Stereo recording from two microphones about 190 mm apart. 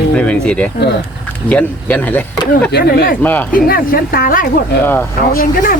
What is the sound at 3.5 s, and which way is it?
Speech, 50° left (ahead or behind).